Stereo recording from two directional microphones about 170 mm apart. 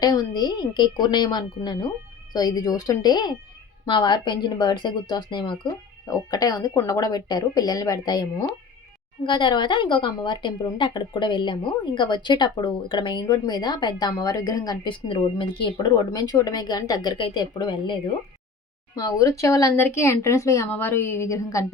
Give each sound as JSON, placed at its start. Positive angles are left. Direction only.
{"t": 0.0, "sound": "a woman's voice", "side_deg": 20}